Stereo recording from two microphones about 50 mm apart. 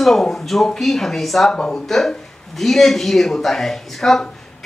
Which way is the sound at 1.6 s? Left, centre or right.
Centre.